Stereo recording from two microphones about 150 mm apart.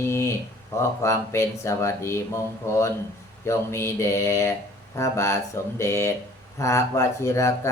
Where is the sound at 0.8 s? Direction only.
20° left (ahead or behind).